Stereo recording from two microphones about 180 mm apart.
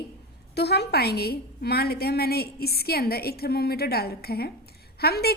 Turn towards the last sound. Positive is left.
turn(degrees=60)  # may be behind; listen again after turning